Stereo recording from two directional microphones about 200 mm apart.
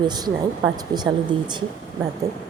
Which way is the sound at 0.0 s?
20° right (ahead or behind).